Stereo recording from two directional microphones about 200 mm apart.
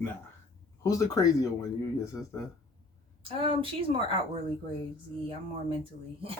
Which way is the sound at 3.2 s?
25° right (ahead or behind).